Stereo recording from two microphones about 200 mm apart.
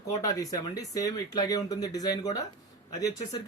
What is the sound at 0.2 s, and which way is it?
Speech, 15° left (ahead or behind).